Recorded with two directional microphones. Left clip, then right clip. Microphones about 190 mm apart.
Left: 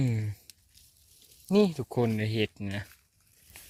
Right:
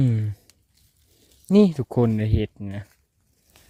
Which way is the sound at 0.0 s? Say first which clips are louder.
Right 7 dB; 30° right (ahead or behind).